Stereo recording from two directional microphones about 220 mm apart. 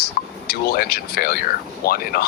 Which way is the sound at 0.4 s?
45° left (ahead or behind).